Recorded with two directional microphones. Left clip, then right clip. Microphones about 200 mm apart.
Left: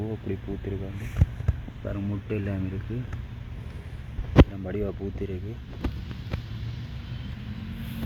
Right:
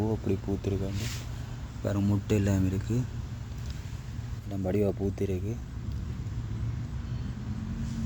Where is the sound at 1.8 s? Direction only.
30° right (ahead or behind).